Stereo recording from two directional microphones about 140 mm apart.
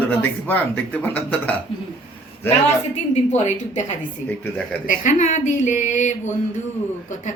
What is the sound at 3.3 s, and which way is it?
A woman's voice, 55° left (ahead or behind).